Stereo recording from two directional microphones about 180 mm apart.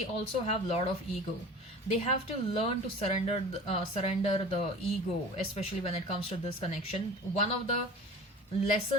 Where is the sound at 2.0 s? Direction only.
30° left (ahead or behind).